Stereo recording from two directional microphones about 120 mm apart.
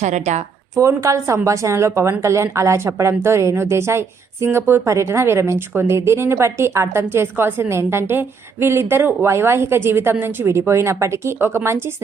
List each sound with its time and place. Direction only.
0.0 s a woman's voice: 75° right (ahead or behind)
0.8 s a woman's voice: 25° right (ahead or behind)